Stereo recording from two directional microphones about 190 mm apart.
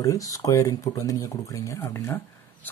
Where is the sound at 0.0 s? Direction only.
15° left (ahead or behind).